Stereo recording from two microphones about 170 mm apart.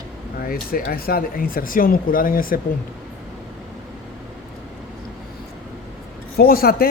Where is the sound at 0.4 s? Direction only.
60° left (ahead or behind).